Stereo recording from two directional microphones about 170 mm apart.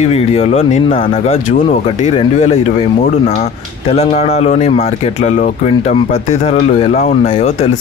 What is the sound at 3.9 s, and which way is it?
Speech, 40° left (ahead or behind).